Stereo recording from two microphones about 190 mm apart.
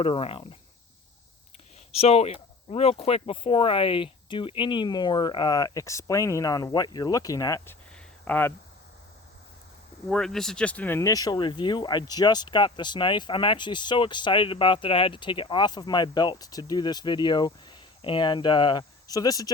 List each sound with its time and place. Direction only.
0.0 s speech: 30° left (ahead or behind)
2.0 s speech: 30° left (ahead or behind); by 8.5 s 10° left (ahead or behind)
10.1 s speech: centre (ahead or behind); by 19.5 s 20° left (ahead or behind)